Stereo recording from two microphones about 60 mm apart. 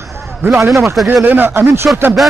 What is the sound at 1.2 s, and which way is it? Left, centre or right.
Speech, right.